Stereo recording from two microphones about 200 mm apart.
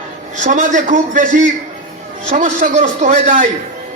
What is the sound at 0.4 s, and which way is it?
A man's voice, 40° right (ahead or behind).